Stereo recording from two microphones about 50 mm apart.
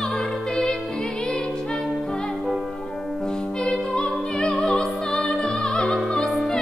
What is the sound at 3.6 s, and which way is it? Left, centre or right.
Music, centre.